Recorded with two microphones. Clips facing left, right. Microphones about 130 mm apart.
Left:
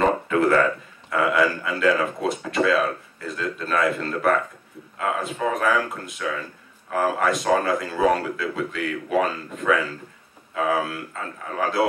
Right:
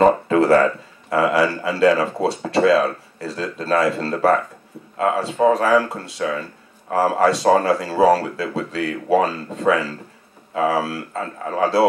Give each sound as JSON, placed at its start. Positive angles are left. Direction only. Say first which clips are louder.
{"t": 0.3, "sound": "speech", "louder": "right 4 dB", "side_deg": -30}